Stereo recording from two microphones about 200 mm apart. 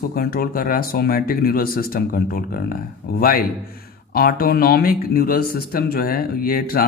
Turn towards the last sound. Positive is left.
turn(degrees=50)  # may be behind; listen again after turning